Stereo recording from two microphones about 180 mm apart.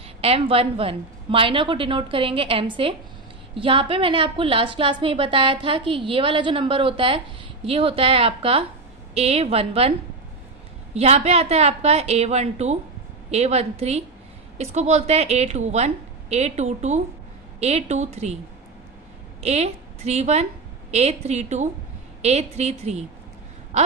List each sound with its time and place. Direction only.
0.2 s a woman's voice: 35° right (ahead or behind)
10.9 s a woman's voice: 35° right (ahead or behind)
19.4 s a woman's voice: 35° right (ahead or behind)
23.7 s a sound: 40° right (ahead or behind)